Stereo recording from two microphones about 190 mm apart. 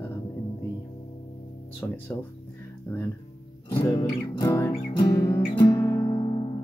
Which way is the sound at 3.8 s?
20° left (ahead or behind).